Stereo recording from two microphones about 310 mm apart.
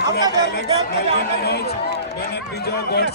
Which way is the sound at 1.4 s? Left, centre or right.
Left.